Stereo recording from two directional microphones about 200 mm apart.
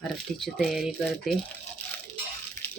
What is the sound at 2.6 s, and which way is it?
Music, 15° left (ahead or behind).